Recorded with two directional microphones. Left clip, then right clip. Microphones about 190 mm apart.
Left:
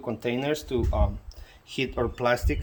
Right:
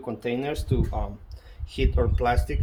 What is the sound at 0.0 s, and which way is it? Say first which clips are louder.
Speech: even; 35° left (ahead or behind).